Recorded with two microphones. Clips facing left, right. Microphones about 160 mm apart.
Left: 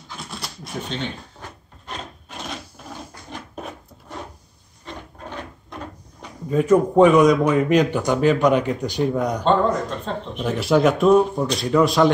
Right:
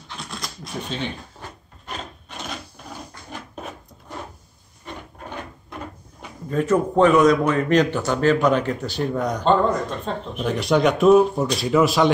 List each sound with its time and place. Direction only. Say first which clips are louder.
0.1 s shuffling cards: even; 5° left (ahead or behind)
0.8 s speech: even; 5° right (ahead or behind)
1.9 s wood: even; centre (ahead or behind)
6.5 s a man's voice: left 3 dB; 10° left (ahead or behind)
10.0 s speech: even; centre (ahead or behind)